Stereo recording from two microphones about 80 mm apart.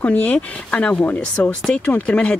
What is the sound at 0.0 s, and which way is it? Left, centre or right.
Speech, centre.